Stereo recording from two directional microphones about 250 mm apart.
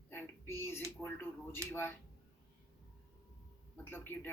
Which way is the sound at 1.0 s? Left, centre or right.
Centre.